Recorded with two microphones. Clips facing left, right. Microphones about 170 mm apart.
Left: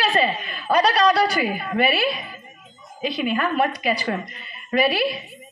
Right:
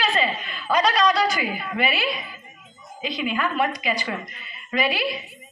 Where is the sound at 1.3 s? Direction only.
35° left (ahead or behind).